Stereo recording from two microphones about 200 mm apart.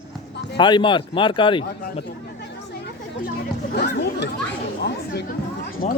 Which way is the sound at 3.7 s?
60° left (ahead or behind).